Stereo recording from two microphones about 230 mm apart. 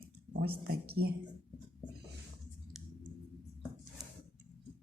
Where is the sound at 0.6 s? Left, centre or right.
Right.